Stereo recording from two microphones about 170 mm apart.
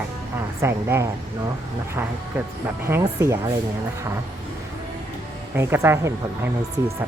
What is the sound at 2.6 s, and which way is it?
Speech, 15° right (ahead or behind).